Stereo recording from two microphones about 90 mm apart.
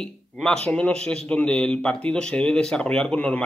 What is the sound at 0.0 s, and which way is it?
A man's voice, 10° left (ahead or behind).